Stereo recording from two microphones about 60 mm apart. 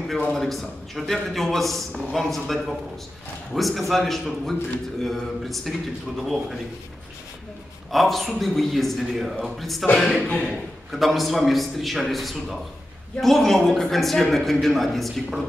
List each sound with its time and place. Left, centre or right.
0.3 s a man's voice: centre
7.9 s a man's voice: centre
10.0 s a man's voice: centre
10.9 s a man's voice: centre